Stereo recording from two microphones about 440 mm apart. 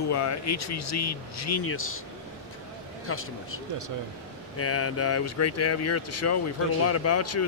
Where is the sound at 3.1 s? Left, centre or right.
Left.